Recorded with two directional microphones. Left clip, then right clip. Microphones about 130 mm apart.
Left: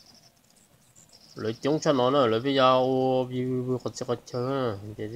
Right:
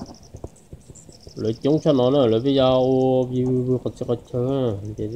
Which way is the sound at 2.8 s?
60° left (ahead or behind).